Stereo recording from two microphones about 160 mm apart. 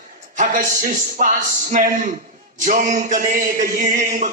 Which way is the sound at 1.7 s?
55° right (ahead or behind).